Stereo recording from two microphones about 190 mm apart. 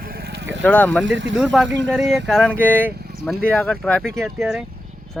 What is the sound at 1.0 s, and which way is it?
Speech, 75° right (ahead or behind).